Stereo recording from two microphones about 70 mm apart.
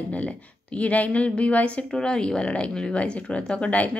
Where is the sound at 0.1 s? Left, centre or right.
Centre.